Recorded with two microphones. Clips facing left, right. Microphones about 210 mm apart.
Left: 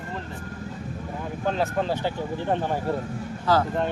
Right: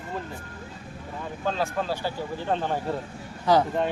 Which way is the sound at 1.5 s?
20° left (ahead or behind).